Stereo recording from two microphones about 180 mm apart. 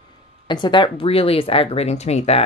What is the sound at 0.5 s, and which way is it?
Speech, 25° left (ahead or behind).